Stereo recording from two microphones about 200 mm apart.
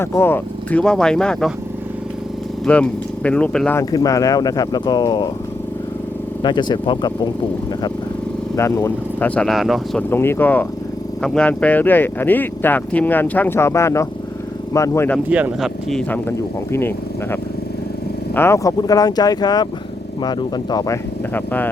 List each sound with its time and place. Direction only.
0.0 s speech: 10° left (ahead or behind)
2.6 s speech: 5° left (ahead or behind)
3.8 s speech: 15° left (ahead or behind)
6.4 s speech: 20° left (ahead or behind)
8.5 s speech: 15° left (ahead or behind)
10.1 s speech: 10° left (ahead or behind)
15.3 s speech: 5° right (ahead or behind)
18.3 s speech: 15° left (ahead or behind)